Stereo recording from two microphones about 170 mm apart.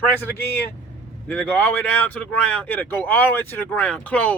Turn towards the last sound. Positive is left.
turn(degrees=10)  # may be behind; listen again after turning